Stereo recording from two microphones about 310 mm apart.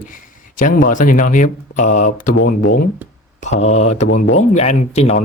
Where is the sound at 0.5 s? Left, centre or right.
Left.